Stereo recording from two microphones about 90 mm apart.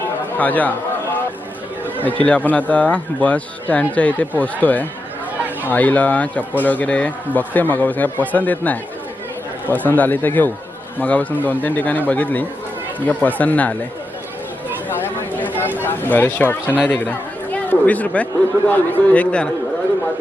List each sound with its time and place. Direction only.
0.3 s speech: 20° left (ahead or behind)
2.0 s speech: 15° left (ahead or behind)
14.8 s a sound: 20° left (ahead or behind)
15.8 s speech: 20° left (ahead or behind)